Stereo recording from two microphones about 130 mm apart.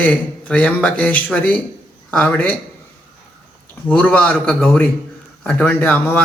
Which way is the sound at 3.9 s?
10° left (ahead or behind).